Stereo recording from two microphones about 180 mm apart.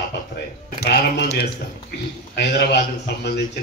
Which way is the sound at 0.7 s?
65° left (ahead or behind).